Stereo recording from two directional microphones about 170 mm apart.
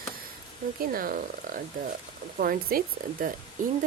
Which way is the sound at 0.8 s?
55° right (ahead or behind).